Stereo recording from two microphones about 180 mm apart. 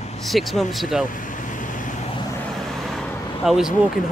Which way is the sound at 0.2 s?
Centre (ahead or behind).